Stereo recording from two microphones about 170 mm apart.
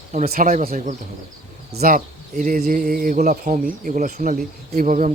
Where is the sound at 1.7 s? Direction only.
65° right (ahead or behind).